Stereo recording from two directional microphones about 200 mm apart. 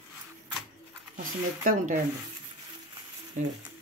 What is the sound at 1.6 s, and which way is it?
Speech, 40° right (ahead or behind).